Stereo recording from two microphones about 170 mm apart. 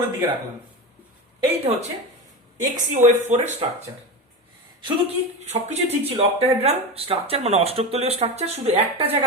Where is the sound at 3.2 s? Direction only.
45° right (ahead or behind).